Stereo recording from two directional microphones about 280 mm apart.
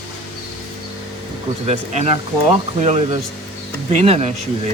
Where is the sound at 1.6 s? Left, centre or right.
Right.